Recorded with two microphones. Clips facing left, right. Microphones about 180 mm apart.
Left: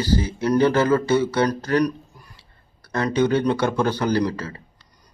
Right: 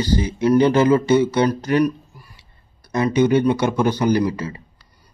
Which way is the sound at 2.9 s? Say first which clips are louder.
Right 3 dB; 15° right (ahead or behind).